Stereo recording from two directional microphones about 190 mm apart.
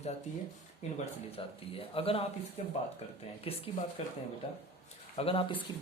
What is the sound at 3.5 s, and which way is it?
Speech, 30° left (ahead or behind).